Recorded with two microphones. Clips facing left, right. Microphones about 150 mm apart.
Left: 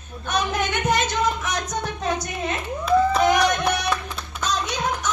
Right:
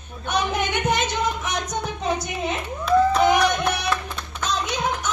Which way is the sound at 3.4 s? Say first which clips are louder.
Even; centre (ahead or behind).